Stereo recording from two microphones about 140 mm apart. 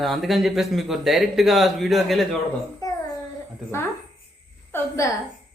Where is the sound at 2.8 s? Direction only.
25° left (ahead or behind).